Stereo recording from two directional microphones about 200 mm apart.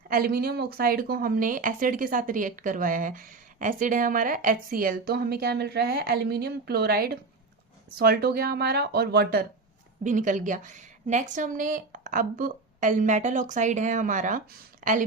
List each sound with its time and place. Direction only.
0.1 s speech: 45° right (ahead or behind)
10.0 s a woman's voice: 40° right (ahead or behind)